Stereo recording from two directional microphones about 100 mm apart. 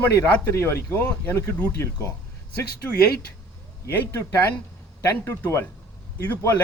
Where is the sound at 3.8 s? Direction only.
30° left (ahead or behind).